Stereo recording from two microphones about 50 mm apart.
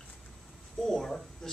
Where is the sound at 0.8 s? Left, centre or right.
Centre.